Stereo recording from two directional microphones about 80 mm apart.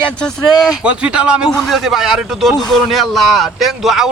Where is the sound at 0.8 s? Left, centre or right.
Centre.